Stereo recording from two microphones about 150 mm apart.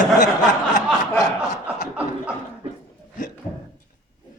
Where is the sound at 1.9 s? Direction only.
10° right (ahead or behind).